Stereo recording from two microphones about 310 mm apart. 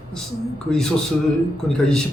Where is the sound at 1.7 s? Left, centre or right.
Centre.